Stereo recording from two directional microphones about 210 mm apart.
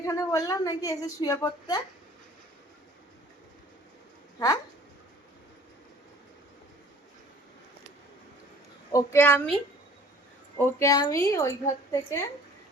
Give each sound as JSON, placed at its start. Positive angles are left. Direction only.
{"t": 0.0, "sound": "a woman's voice", "side_deg": 15}
{"t": 4.4, "sound": "speech", "side_deg": 20}
{"t": 8.9, "sound": "a woman's voice", "side_deg": 15}
{"t": 10.6, "sound": "a woman's voice", "side_deg": 15}